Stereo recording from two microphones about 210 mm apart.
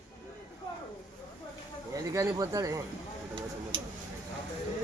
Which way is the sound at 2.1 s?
15° right (ahead or behind).